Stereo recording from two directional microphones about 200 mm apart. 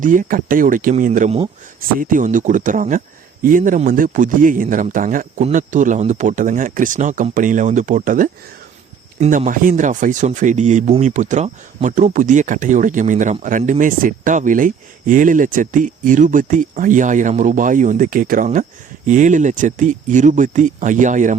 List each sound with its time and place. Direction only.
0.0 s speech: 40° right (ahead or behind)